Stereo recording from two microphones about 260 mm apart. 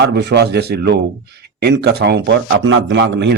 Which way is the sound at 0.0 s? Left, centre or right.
Right.